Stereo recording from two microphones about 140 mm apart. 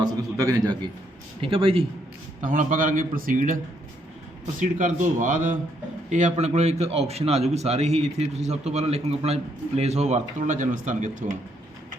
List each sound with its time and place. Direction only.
0.0 s a man's voice: 25° right (ahead or behind)
1.4 s a man's voice: 40° right (ahead or behind)
2.4 s a man's voice: 70° right (ahead or behind)
4.6 s a man's voice: 65° right (ahead or behind)